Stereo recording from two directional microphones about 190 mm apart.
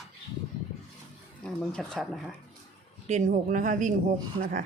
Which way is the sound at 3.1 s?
45° right (ahead or behind).